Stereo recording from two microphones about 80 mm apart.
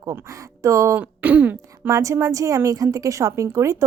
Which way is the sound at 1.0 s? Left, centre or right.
Right.